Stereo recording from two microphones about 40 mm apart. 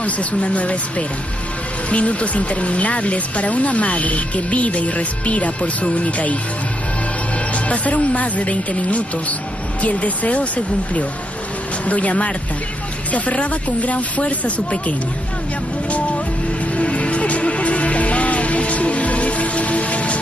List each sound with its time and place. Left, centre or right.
0.0 s speech: left
7.5 s speech: left
16.7 s music: left